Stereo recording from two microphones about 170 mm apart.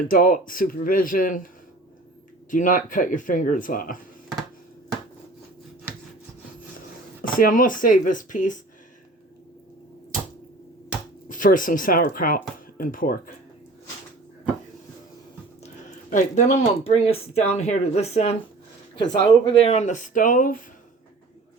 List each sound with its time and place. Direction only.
0.1 s speech: 55° left (ahead or behind)
2.5 s speech: 50° left (ahead or behind)
7.2 s speech: 55° left (ahead or behind)
11.3 s speech: 50° left (ahead or behind)
15.6 s speech: 45° left (ahead or behind)